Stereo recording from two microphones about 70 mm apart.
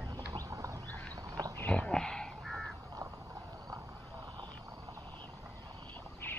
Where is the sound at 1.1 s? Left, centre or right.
Right.